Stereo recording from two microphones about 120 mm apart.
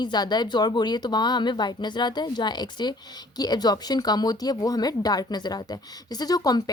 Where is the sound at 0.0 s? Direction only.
35° left (ahead or behind).